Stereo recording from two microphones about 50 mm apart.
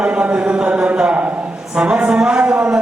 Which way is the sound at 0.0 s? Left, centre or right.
Right.